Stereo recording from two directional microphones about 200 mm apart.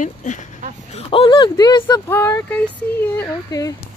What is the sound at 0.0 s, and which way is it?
Speech, 40° left (ahead or behind).